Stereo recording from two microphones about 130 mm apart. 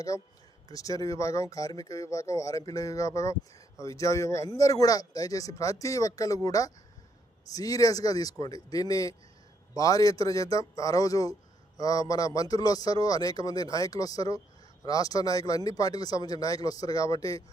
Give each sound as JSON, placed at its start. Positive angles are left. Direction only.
{"t": 0.7, "sound": "speech", "side_deg": 25}